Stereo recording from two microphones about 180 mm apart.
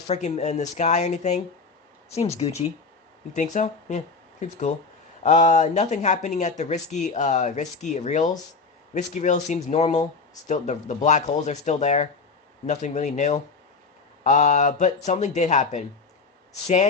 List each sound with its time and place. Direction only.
0.1 s speech: 40° left (ahead or behind)